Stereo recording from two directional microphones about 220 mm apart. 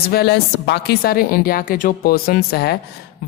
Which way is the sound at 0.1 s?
45° left (ahead or behind).